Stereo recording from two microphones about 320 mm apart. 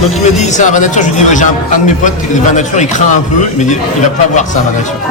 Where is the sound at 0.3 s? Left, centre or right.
Left.